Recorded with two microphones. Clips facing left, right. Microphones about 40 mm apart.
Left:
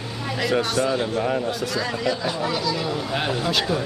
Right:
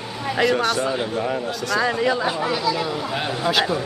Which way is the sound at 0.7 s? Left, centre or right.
Centre.